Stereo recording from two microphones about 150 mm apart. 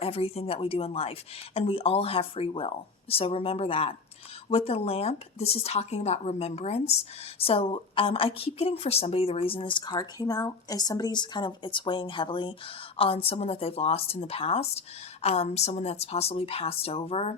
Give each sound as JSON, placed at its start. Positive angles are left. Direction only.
{"t": 0.0, "sound": "a woman's voice", "side_deg": 40}